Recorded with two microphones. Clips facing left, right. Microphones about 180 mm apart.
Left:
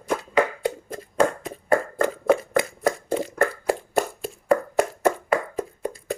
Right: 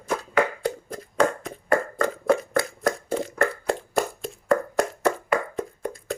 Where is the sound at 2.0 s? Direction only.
20° left (ahead or behind).